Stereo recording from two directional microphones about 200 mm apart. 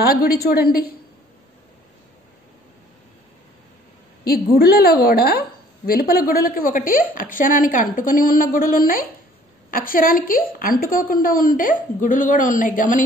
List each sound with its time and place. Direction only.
0.0 s a woman's voice: 50° left (ahead or behind)
4.6 s a woman's voice: 50° left (ahead or behind)